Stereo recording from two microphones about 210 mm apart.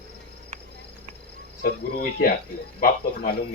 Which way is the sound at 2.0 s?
45° left (ahead or behind).